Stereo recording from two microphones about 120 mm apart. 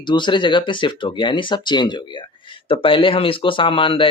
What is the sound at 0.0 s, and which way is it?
Speech, 40° left (ahead or behind).